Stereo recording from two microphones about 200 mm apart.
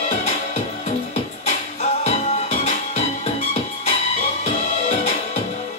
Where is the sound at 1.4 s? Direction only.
35° left (ahead or behind).